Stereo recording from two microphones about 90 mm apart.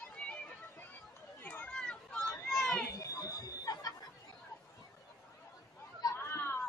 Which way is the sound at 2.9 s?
45° left (ahead or behind).